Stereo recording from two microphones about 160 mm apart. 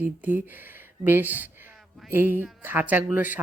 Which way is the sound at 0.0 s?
10° right (ahead or behind).